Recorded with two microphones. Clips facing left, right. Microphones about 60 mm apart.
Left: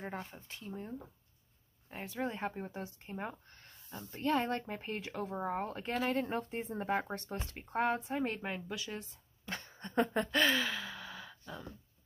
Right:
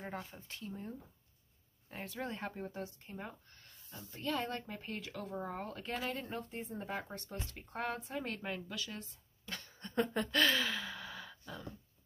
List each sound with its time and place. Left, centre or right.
0.0 s speech: centre
3.1 s speech: left
10.6 s gasp: centre